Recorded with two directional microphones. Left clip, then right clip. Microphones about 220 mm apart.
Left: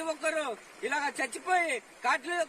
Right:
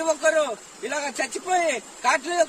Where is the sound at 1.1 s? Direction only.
35° right (ahead or behind).